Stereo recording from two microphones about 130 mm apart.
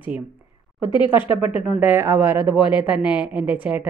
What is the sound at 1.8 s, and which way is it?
A woman's voice, 15° right (ahead or behind).